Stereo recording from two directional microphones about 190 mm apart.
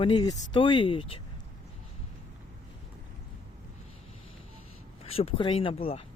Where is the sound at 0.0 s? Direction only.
25° left (ahead or behind).